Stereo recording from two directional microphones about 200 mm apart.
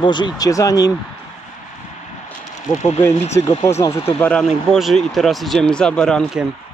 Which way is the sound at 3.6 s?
15° left (ahead or behind).